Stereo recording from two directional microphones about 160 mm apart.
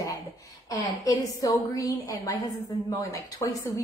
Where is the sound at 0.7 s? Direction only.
20° left (ahead or behind).